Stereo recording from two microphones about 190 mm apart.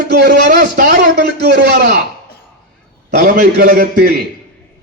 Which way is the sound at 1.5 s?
60° right (ahead or behind).